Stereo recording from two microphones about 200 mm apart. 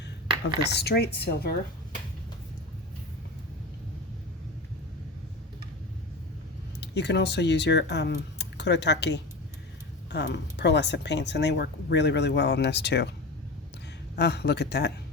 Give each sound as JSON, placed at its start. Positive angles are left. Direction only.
{"t": 0.6, "sound": "speech", "side_deg": 55}
{"t": 6.7, "sound": "speech", "side_deg": 60}
{"t": 14.2, "sound": "speech", "side_deg": 55}